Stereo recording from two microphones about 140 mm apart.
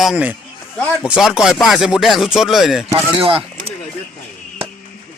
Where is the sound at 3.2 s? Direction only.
40° right (ahead or behind).